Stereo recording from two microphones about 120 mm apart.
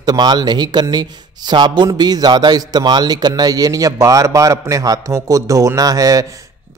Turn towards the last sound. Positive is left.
turn(degrees=-30)  # may be behind; listen again after turning